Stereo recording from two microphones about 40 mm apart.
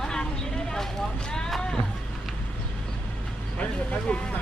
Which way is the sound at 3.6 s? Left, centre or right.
Left.